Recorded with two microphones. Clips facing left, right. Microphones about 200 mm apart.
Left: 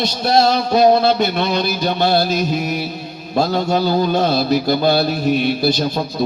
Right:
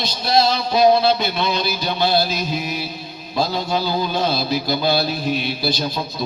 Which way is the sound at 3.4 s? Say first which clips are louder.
Left 5 dB; 50° left (ahead or behind).